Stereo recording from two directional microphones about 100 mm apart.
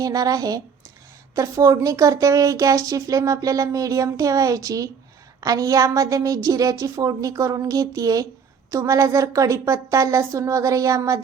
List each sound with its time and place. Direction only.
0.0 s speech: 35° right (ahead or behind)